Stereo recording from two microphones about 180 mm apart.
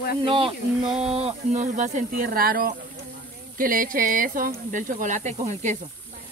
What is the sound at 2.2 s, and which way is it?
Speech, 55° right (ahead or behind).